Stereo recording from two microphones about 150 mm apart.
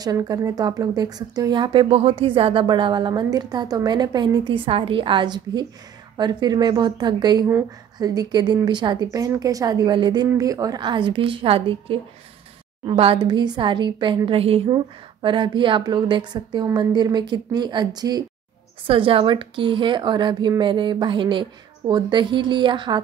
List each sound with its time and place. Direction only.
0.0 s a woman's voice: 25° right (ahead or behind)